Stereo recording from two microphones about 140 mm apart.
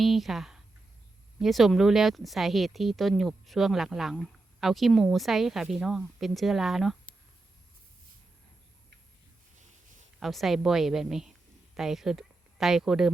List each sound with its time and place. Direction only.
0.0 s speech: centre (ahead or behind)
10.2 s speech: centre (ahead or behind)